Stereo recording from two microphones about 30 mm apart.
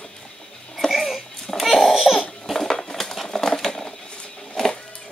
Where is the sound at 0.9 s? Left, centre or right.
Centre.